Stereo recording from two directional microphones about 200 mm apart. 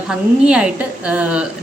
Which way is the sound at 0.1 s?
5° right (ahead or behind).